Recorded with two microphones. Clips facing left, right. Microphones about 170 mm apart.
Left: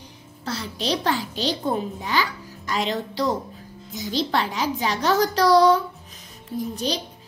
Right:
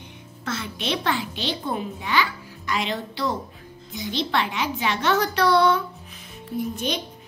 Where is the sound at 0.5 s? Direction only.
35° left (ahead or behind).